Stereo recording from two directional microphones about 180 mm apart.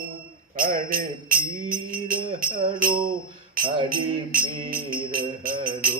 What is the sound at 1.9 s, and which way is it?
Music, 50° right (ahead or behind).